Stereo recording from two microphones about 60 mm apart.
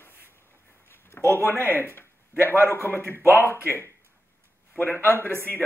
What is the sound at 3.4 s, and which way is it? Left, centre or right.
A man's voice, left.